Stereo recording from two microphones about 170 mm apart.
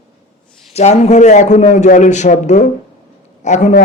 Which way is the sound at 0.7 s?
40° left (ahead or behind).